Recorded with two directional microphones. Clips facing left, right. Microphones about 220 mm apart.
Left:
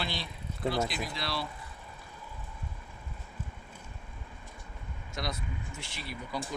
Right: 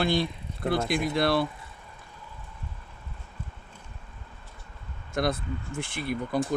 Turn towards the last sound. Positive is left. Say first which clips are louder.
# right 10 dB
turn(degrees=-50)  # may be behind; listen again after turning